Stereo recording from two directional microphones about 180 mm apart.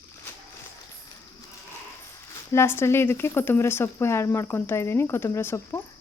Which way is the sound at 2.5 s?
15° left (ahead or behind).